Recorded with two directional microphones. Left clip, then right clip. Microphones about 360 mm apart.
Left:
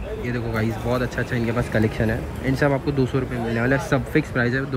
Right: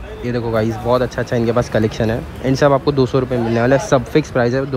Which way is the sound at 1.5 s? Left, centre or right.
Left.